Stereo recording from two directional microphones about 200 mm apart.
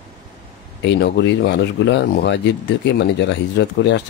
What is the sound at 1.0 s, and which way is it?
Speech, 60° left (ahead or behind).